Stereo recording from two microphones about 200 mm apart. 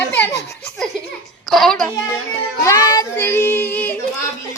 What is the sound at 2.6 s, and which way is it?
A child's voice, 15° left (ahead or behind).